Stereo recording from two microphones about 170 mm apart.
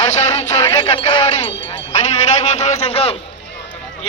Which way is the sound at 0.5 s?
20° left (ahead or behind).